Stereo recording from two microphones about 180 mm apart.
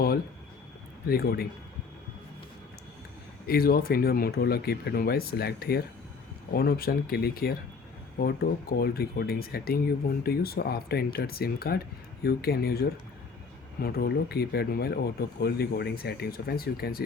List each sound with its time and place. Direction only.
1.0 s speech: 60° left (ahead or behind)
3.4 s speech: 55° left (ahead or behind)